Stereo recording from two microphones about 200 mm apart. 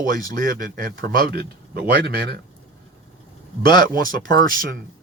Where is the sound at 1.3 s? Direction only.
55° right (ahead or behind).